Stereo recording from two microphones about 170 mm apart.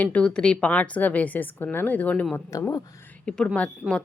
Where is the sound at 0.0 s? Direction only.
5° left (ahead or behind).